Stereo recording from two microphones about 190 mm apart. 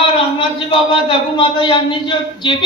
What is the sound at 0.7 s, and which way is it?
A man's voice, 25° left (ahead or behind).